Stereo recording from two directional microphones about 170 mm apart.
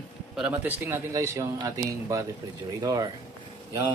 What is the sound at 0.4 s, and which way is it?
A man's voice, 10° right (ahead or behind).